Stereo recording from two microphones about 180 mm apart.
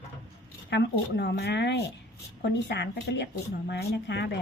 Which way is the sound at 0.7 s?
65° left (ahead or behind).